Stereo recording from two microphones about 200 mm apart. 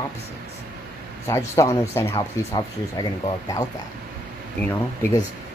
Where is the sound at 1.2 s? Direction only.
15° left (ahead or behind).